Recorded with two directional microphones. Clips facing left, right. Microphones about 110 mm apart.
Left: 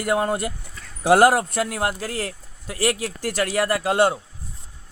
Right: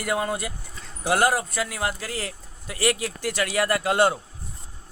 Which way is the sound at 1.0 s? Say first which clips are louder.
Left 6 dB; 80° left.